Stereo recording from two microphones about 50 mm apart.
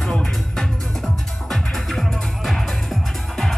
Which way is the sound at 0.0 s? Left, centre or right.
Centre.